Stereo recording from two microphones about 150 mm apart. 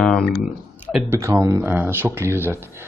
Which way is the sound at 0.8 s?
10° right (ahead or behind).